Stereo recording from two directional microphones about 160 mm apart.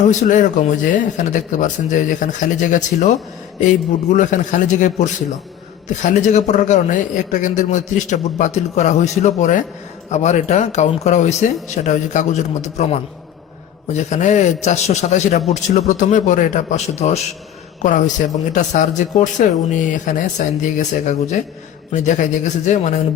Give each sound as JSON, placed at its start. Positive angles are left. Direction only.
{"t": 0.1, "sound": "a man's voice", "side_deg": 50}
{"t": 18.5, "sound": "a man's voice", "side_deg": 50}